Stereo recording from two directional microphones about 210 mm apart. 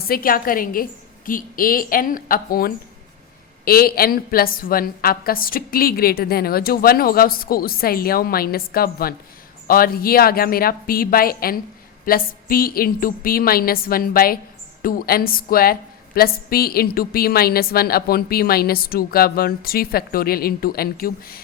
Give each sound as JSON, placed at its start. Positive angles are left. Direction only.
{"t": 0.1, "sound": "a woman's voice", "side_deg": 45}